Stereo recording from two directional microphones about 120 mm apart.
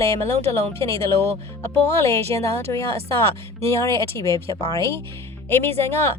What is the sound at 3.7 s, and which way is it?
Speech, 25° left (ahead or behind).